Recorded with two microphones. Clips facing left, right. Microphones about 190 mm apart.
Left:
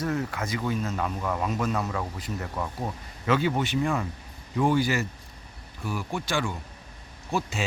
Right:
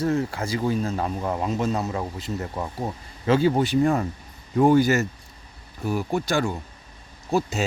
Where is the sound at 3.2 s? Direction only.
35° right (ahead or behind).